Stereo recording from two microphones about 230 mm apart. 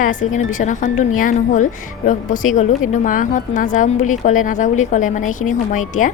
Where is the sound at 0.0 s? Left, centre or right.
Left.